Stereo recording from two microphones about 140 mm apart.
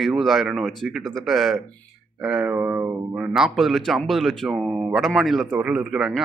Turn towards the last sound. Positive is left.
turn(degrees=-5)  # may be behind; listen again after turning